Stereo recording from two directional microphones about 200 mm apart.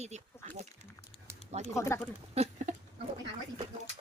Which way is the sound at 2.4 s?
35° right (ahead or behind).